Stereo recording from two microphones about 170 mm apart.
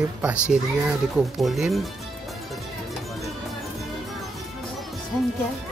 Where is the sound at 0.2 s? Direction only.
10° right (ahead or behind).